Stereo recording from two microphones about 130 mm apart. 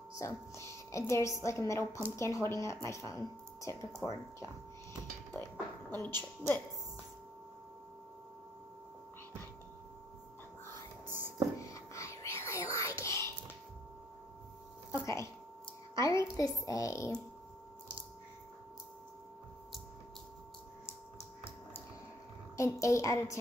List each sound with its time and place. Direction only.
0.2 s a woman's voice: 25° left (ahead or behind)
5.3 s music: 15° left (ahead or behind)
6.0 s a woman's voice: 15° left (ahead or behind)
11.1 s whispering: 15° right (ahead or behind)
11.6 s whispering: 25° left (ahead or behind)
14.9 s a sound: 25° left (ahead or behind)
15.9 s music: 25° left (ahead or behind)
22.6 s a child's voice: 25° left (ahead or behind)